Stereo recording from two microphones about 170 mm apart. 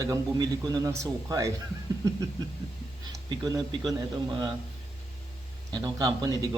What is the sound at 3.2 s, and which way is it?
Speech, 25° right (ahead or behind).